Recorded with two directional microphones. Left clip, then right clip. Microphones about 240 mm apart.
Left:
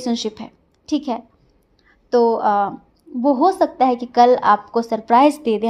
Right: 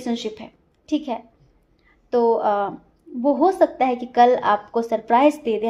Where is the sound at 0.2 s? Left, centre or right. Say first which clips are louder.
Left 4 dB; left.